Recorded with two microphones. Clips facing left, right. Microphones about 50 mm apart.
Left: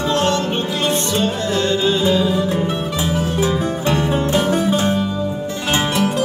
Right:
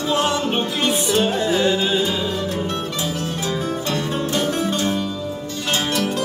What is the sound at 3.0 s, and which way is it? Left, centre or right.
Music, left.